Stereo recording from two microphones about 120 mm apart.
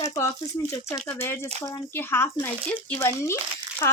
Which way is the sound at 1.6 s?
30° left (ahead or behind).